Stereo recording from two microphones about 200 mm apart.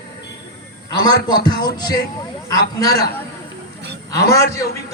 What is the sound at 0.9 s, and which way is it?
A man's voice, 20° left (ahead or behind).